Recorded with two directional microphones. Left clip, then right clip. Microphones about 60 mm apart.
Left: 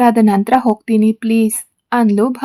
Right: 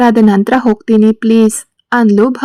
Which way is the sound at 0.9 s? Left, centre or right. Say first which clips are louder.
Right 6 dB; right.